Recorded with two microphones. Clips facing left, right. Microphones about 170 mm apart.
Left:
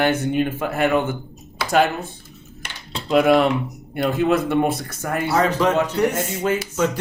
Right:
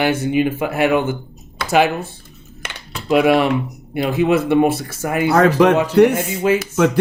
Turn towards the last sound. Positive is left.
turn(degrees=-5)  # may be behind; listen again after turning